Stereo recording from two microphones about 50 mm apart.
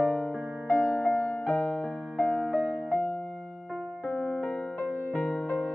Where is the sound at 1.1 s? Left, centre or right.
Left.